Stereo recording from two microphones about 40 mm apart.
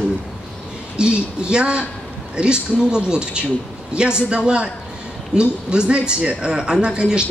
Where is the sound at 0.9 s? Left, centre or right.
Right.